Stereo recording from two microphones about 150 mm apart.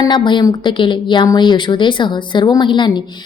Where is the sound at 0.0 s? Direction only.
30° left (ahead or behind).